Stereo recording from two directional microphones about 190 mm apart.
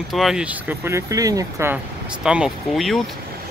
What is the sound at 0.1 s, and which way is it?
Speech, centre (ahead or behind).